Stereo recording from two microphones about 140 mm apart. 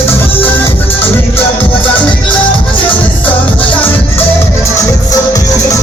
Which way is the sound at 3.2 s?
10° left (ahead or behind).